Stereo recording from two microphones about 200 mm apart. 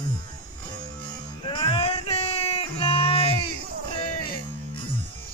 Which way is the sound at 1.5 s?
25° left (ahead or behind).